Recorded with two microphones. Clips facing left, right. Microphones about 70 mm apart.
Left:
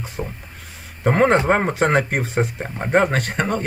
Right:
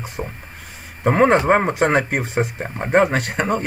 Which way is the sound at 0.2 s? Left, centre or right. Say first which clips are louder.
Even; centre.